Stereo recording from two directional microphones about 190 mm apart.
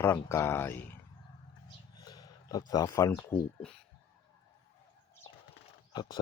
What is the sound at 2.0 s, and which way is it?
Speech, 20° left (ahead or behind).